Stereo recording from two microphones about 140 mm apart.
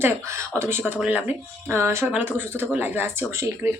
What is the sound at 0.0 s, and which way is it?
Speech, 20° right (ahead or behind).